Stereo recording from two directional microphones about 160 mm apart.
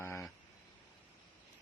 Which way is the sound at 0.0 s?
15° left (ahead or behind).